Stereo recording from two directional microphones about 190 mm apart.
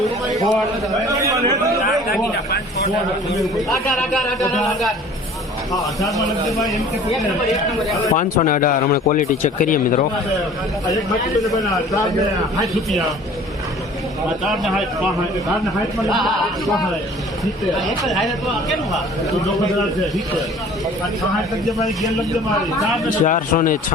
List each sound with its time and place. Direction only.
0.4 s a man's voice: centre (ahead or behind)
1.0 s a man's voice: 20° right (ahead or behind)
3.3 s a man's voice: centre (ahead or behind)
5.8 s a man's voice: centre (ahead or behind)
8.1 s speech: 40° left (ahead or behind)
14.4 s a man's voice: centre (ahead or behind)
17.4 s a man's voice: centre (ahead or behind)
21.7 s a man's voice: centre (ahead or behind)
23.0 s speech: 45° left (ahead or behind)